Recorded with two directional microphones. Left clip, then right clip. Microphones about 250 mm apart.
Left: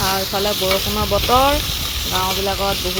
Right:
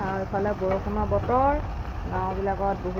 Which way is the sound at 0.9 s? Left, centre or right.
Left.